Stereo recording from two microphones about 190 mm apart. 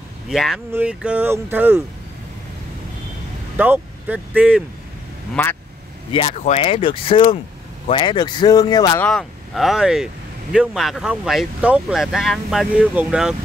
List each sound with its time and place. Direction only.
0.3 s speech: centre (ahead or behind)
3.5 s speech: 10° right (ahead or behind)
5.3 s speech: 10° left (ahead or behind)
6.1 s speech: 30° left (ahead or behind)
9.0 s speech: centre (ahead or behind)